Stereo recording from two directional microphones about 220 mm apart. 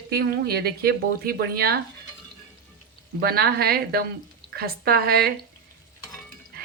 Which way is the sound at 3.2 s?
45° right (ahead or behind).